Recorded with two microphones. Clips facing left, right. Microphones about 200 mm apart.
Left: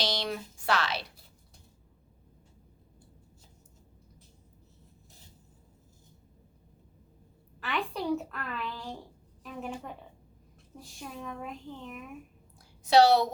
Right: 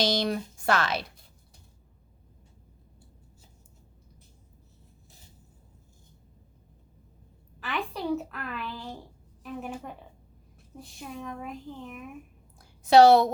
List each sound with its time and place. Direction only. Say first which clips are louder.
0.0 s speech: right 6 dB; 45° right (ahead or behind)
7.6 s a child's voice: even; centre (ahead or behind)
12.5 s a sound: right 4 dB; 50° right (ahead or behind)